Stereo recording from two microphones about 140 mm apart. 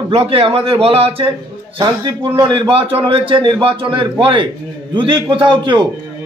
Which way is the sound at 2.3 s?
35° right (ahead or behind).